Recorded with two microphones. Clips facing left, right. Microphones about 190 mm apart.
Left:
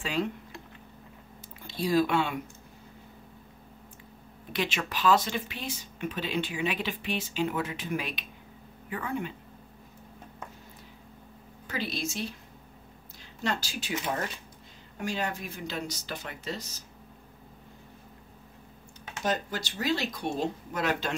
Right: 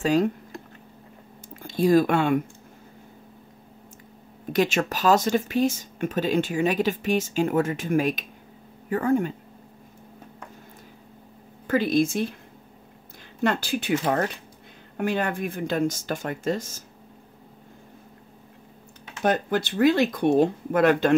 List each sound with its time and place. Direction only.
0.0 s speech: 40° right (ahead or behind)
1.6 s speech: 50° right (ahead or behind)
4.5 s speech: 45° right (ahead or behind)
11.6 s speech: 50° right (ahead or behind)
13.4 s speech: 55° right (ahead or behind)
19.2 s speech: 60° right (ahead or behind)